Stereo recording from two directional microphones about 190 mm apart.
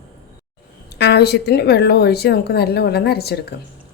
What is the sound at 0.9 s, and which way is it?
Speech, 60° left (ahead or behind).